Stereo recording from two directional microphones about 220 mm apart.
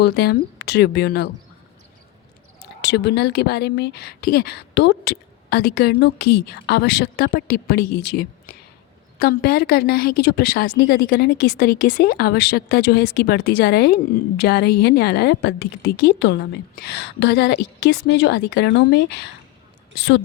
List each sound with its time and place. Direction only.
0.0 s a woman's voice: 45° left (ahead or behind)
2.6 s a woman's voice: 50° left (ahead or behind)